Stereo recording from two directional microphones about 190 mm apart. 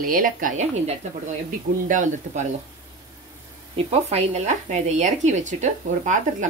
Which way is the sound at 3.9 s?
35° right (ahead or behind).